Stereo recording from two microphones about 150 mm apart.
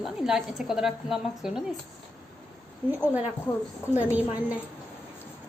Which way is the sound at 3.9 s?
10° right (ahead or behind).